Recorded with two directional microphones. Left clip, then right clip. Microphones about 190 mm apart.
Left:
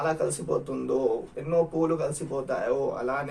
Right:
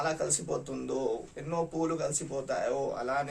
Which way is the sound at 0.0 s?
20° right (ahead or behind).